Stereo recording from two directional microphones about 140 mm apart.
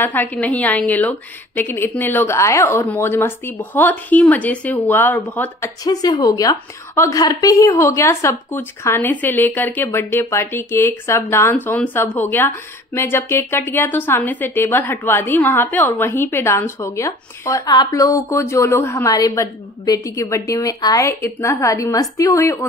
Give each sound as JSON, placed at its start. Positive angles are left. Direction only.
{"t": 0.0, "sound": "speech", "side_deg": 15}
{"t": 5.6, "sound": "a woman's voice", "side_deg": 30}